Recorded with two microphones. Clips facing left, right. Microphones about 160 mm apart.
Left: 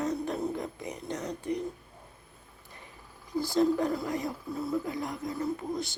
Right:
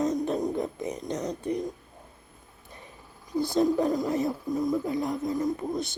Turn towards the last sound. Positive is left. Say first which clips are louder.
# right 3 dB
turn(degrees=-20)  # may be behind; listen again after turning